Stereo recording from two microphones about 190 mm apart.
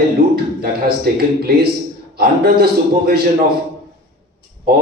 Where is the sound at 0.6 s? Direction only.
55° right (ahead or behind).